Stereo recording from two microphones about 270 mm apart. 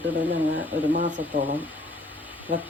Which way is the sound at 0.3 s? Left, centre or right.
Right.